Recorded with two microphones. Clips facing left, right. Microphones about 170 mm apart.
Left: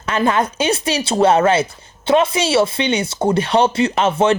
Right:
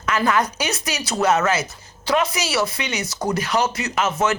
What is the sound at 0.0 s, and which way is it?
A woman's voice, 30° left (ahead or behind).